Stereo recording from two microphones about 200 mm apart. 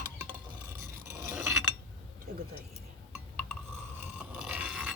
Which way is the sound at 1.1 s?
10° right (ahead or behind).